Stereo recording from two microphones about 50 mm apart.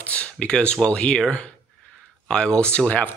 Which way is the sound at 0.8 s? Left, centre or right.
Left.